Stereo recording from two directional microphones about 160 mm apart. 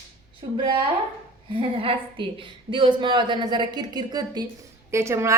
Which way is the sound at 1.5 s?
35° right (ahead or behind).